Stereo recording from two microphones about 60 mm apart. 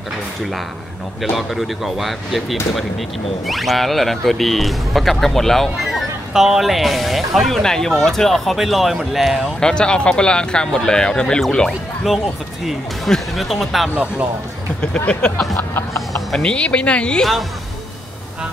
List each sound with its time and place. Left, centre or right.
1.3 s speech: centre
3.4 s speech: centre
9.6 s speech: centre
12.6 s speech: centre
15.0 s speech: centre
17.2 s speech: centre